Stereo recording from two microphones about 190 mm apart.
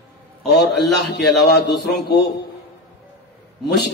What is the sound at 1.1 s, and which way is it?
A man's voice, 60° left (ahead or behind).